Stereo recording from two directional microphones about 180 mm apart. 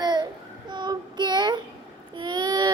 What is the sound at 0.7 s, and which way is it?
Child singing, 25° right (ahead or behind).